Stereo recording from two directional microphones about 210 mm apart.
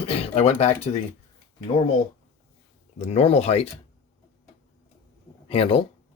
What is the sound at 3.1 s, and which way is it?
Speech, 30° left (ahead or behind).